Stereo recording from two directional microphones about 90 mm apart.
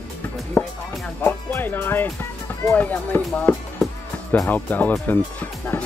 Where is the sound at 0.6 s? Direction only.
20° left (ahead or behind).